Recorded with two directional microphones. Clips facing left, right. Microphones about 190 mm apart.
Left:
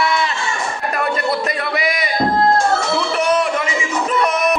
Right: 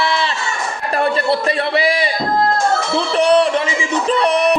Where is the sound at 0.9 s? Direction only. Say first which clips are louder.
Right 4 dB; 30° right (ahead or behind).